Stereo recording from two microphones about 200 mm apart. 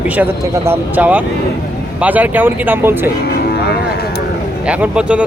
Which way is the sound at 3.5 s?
50° left (ahead or behind).